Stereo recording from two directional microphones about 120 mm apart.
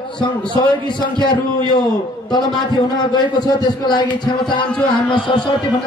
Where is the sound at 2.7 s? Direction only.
40° left (ahead or behind).